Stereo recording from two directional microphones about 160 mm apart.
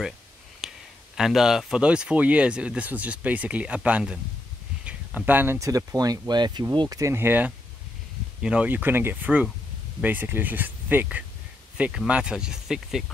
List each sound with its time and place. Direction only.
0.6 s speech: 5° right (ahead or behind)